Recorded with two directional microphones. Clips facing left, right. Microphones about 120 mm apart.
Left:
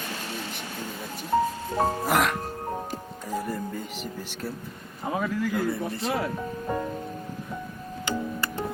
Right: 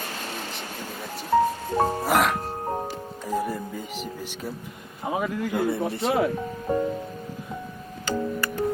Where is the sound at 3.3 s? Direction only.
10° right (ahead or behind).